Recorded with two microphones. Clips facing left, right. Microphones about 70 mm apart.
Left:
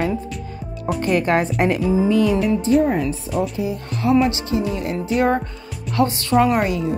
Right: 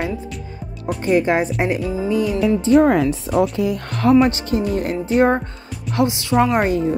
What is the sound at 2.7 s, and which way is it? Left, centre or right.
Speech, right.